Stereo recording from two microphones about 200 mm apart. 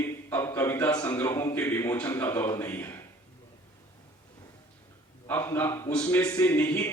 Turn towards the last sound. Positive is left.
turn(degrees=10)  # may be behind; listen again after turning